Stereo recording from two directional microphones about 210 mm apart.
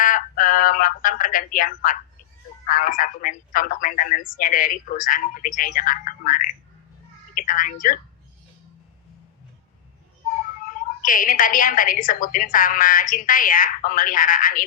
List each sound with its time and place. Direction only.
0.0 s speech: 40° left (ahead or behind)
11.0 s speech: 40° left (ahead or behind)